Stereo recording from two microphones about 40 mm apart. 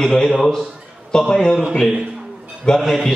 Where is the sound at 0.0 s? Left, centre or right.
Centre.